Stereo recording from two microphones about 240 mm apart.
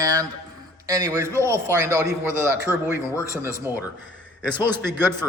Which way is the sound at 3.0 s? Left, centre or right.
Centre.